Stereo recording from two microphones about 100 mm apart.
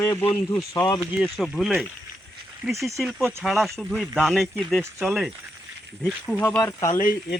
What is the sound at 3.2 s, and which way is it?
Speech, 25° right (ahead or behind).